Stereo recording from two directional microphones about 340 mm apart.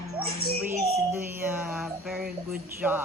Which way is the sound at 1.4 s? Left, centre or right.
Centre.